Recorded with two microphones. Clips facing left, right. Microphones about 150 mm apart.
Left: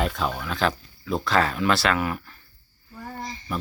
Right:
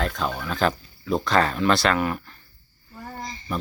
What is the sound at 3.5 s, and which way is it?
Speech, 5° left (ahead or behind).